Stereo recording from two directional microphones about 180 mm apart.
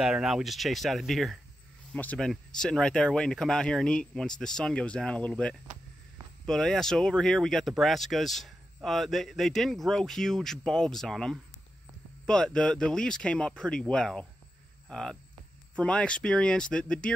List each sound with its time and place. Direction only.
0.0 s speech: centre (ahead or behind)
14.9 s a sound: 5° left (ahead or behind)
15.7 s speech: 5° left (ahead or behind)